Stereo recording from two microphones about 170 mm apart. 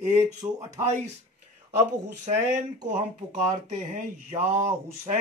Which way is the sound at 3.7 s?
40° right (ahead or behind).